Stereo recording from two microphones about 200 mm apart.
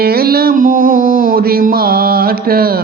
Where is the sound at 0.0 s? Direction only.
50° right (ahead or behind).